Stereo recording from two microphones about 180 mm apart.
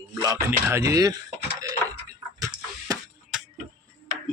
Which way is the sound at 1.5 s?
20° right (ahead or behind).